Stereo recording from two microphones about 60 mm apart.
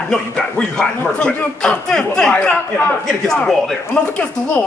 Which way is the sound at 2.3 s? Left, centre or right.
Left.